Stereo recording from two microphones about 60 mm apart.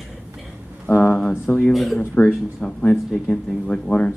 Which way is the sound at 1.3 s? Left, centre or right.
Left.